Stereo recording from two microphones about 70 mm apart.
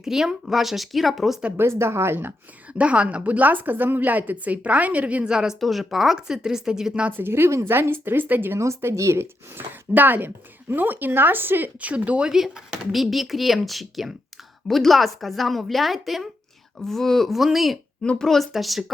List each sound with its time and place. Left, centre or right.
0.0 s speech: centre
1.5 s speech: right
2.7 s speech: centre
5.5 s a woman's voice: centre
7.2 s speech: right
8.6 s speech: right; by 17.7 s centre
18.0 s speech: centre